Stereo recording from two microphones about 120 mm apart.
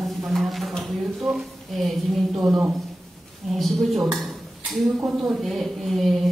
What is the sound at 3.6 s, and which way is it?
Dishes, centre (ahead or behind).